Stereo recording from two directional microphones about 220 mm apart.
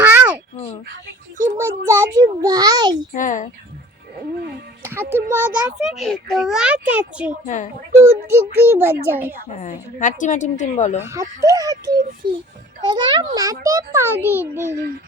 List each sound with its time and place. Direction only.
0.0 s a sound: 5° right (ahead or behind)
1.5 s a child's voice: 10° right (ahead or behind)
3.2 s a woman's voice: 35° left (ahead or behind)
4.8 s a child's voice: 10° right (ahead or behind)
7.4 s a woman's voice: 35° left (ahead or behind)
7.9 s a child's voice: 10° right (ahead or behind)
9.5 s a woman's voice: 35° left (ahead or behind)
11.0 s a child's voice: 15° right (ahead or behind)